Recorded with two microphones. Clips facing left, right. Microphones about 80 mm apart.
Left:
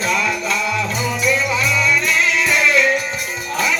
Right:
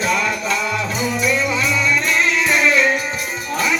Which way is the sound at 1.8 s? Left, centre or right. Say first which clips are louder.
Even; centre.